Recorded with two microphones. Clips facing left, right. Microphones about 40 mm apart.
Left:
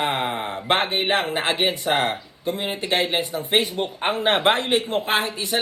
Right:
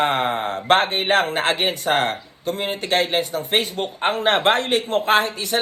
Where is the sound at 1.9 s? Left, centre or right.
Right.